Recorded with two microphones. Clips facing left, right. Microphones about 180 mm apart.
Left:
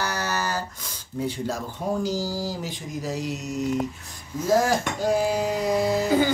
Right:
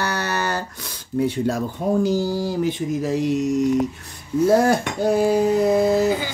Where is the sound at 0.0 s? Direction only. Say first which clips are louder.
Right 4 dB; 65° right (ahead or behind).